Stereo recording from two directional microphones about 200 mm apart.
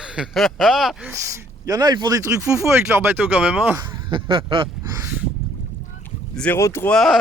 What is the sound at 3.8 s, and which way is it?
Speech, 25° right (ahead or behind).